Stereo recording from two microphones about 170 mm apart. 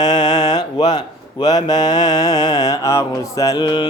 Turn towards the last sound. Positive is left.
turn(degrees=25)  # may be behind; listen again after turning